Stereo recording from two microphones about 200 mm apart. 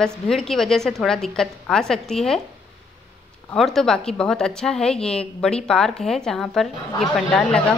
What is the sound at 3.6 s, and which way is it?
A woman's voice, centre (ahead or behind).